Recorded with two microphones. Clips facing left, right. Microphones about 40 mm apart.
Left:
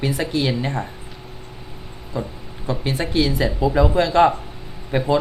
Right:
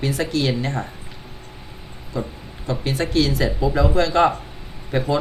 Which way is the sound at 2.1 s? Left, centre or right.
Left.